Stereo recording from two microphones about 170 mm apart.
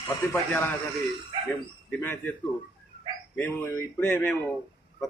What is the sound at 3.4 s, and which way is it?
A man's voice, 10° left (ahead or behind).